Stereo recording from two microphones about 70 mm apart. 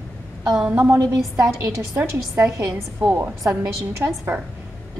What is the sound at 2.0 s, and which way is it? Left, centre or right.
A woman's voice, right.